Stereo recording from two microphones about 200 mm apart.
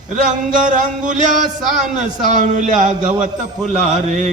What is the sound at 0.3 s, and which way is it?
A man's voice, 40° right (ahead or behind).